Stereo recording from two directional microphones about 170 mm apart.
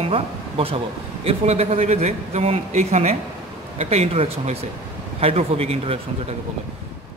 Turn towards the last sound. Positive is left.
turn(degrees=-35)  # may be behind; listen again after turning